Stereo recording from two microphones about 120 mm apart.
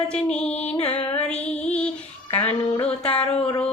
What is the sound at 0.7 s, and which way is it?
Music, 55° left (ahead or behind).